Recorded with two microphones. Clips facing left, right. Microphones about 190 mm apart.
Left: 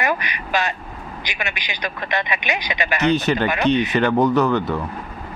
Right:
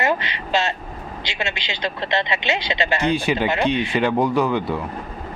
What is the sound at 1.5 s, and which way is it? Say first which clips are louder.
Speech: right 2 dB; 15° left (ahead or behind).